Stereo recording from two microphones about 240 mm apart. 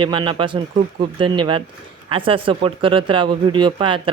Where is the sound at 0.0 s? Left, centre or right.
Centre.